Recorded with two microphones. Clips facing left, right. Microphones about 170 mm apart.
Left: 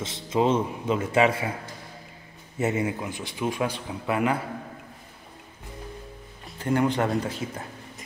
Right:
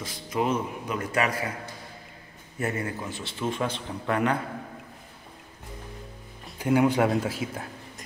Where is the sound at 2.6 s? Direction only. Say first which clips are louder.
Left 4 dB; 20° left (ahead or behind).